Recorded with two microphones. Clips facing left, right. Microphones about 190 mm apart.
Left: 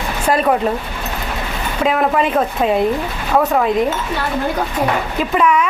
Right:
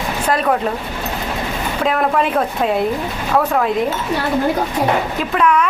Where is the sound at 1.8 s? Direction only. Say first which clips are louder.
Left 2 dB; centre (ahead or behind).